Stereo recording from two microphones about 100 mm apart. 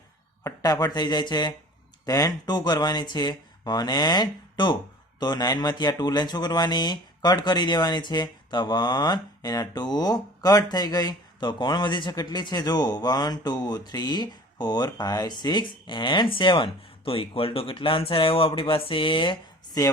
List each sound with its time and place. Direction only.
0.4 s speech: 40° left (ahead or behind); by 16.6 s 55° left (ahead or behind)
17.1 s speech: 65° left (ahead or behind)